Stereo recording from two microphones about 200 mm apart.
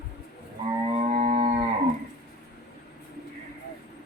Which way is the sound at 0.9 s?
35° right (ahead or behind).